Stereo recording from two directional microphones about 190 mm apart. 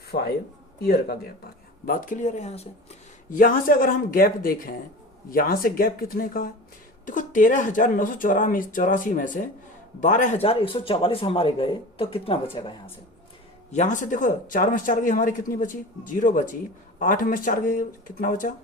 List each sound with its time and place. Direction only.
0.1 s speech: 55° left (ahead or behind); by 2.6 s 35° left (ahead or behind)
3.2 s a man's voice: 45° left (ahead or behind); by 12.9 s 25° left (ahead or behind)
13.7 s speech: 40° left (ahead or behind)